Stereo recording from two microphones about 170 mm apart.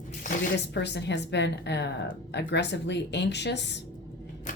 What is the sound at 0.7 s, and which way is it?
Speech, 90° left.